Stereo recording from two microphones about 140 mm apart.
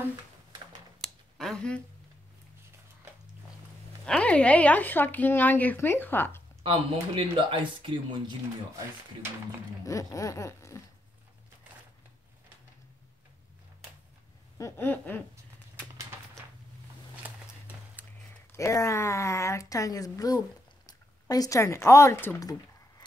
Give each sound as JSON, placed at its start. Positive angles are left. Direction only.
{"t": 1.0, "sound": "a sound", "side_deg": 5}
{"t": 4.0, "sound": "speech", "side_deg": 5}
{"t": 6.6, "sound": "speech", "side_deg": -35}
{"t": 9.8, "sound": "speech", "side_deg": 25}
{"t": 14.6, "sound": "speech", "side_deg": 15}
{"t": 18.6, "sound": "speech", "side_deg": 20}
{"t": 22.4, "sound": "a sound", "side_deg": 25}